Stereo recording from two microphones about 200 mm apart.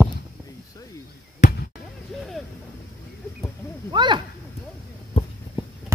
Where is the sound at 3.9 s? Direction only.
25° right (ahead or behind).